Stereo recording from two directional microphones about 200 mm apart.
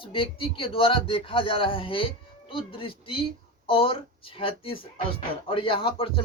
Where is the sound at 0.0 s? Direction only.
25° left (ahead or behind).